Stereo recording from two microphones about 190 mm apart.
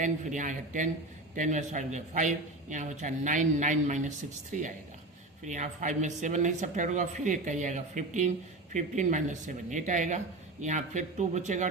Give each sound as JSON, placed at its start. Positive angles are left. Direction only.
{"t": 0.0, "sound": "speech", "side_deg": -40}